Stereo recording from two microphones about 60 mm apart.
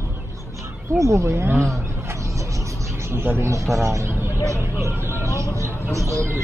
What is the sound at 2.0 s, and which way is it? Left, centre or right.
Vehicle, right.